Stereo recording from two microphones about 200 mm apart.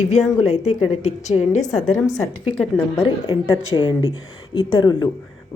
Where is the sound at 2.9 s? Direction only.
30° left (ahead or behind).